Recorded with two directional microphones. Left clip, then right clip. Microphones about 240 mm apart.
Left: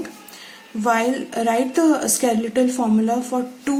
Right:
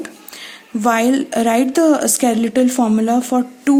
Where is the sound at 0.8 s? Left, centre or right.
Right.